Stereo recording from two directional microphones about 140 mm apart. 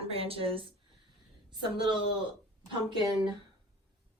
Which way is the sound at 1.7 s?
35° right (ahead or behind).